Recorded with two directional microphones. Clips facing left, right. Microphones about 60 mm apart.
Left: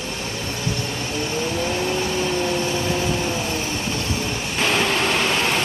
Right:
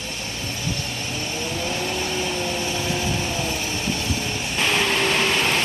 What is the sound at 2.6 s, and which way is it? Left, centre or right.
Vehicle, left.